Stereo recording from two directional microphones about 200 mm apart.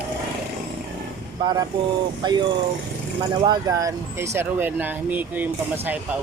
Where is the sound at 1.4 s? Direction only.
20° right (ahead or behind).